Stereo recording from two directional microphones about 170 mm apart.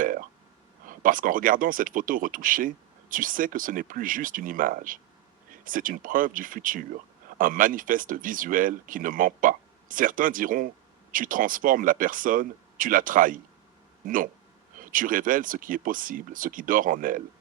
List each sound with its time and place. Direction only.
0.0 s a sound: 55° right (ahead or behind)
0.9 s speech: 55° right (ahead or behind)
14.8 s speech: 55° right (ahead or behind)